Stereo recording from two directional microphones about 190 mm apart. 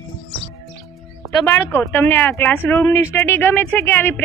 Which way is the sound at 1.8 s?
10° left (ahead or behind).